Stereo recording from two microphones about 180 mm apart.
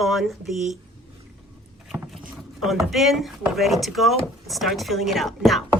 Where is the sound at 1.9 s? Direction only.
5° right (ahead or behind).